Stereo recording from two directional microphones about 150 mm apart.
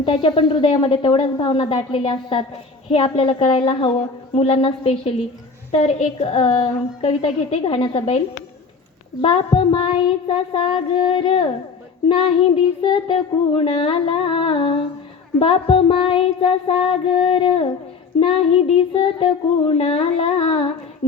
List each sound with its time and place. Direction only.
0.0 s speech: 35° left (ahead or behind)
9.2 s speech: 35° left (ahead or behind)